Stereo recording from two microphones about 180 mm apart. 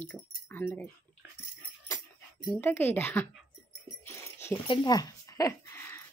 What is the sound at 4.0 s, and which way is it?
Dog, 15° left (ahead or behind).